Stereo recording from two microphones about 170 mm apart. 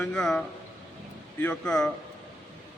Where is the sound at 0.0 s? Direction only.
5° left (ahead or behind).